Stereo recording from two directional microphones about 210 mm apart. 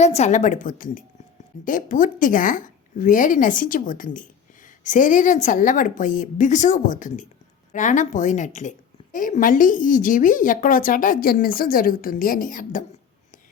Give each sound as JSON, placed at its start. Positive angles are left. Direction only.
{"t": 0.0, "sound": "a woman's voice", "side_deg": 30}